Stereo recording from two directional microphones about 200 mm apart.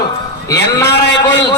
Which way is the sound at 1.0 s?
60° left (ahead or behind).